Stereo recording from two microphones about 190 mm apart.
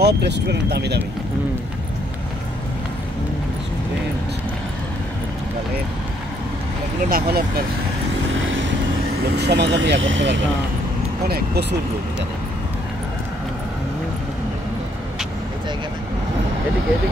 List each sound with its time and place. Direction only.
0.0 s speech: 65° right (ahead or behind)
7.1 s speech: 50° right (ahead or behind)
8.4 s vehicle: 85° right
9.4 s speech: 65° right (ahead or behind); by 10.4 s 80° right
11.2 s speech: 55° right (ahead or behind)